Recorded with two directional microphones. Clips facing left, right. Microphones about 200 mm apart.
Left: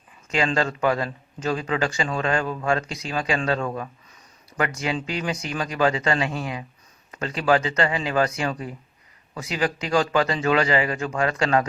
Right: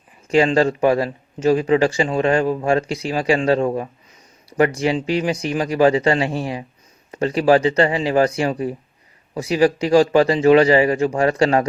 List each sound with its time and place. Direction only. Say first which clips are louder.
0.3 s a man's voice: right 8 dB; 30° right (ahead or behind)